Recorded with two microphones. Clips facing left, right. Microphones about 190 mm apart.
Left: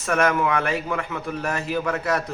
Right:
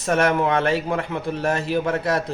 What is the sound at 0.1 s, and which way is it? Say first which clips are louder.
Speech: right 2 dB; 30° right (ahead or behind).